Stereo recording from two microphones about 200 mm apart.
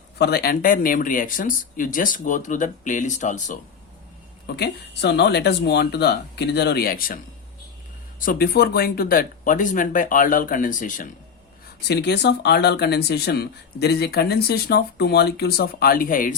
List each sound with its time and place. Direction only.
0.2 s speech: 50° left (ahead or behind)
4.4 s speech: 55° left (ahead or behind)
8.2 s speech: 45° left (ahead or behind)
11.9 s speech: 55° left (ahead or behind)